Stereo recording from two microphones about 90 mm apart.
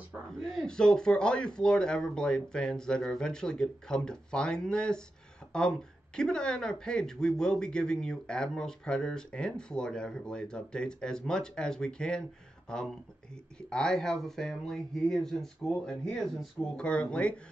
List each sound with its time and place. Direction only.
0.3 s speech: 5° left (ahead or behind)